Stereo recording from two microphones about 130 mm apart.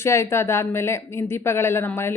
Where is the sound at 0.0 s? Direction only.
20° left (ahead or behind).